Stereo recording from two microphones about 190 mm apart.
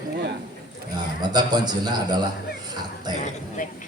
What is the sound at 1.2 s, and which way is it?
A man's voice, 20° right (ahead or behind).